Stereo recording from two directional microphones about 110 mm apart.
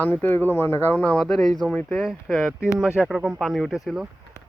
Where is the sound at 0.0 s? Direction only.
15° left (ahead or behind); by 4.1 s centre (ahead or behind).